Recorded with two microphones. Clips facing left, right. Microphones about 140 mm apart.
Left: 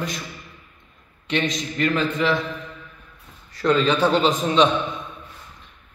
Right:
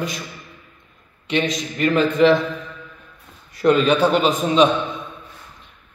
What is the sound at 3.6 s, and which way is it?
A man's voice, 15° right (ahead or behind).